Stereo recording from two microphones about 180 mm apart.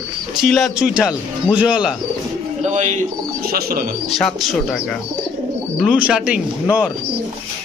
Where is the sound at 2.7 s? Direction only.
40° right (ahead or behind).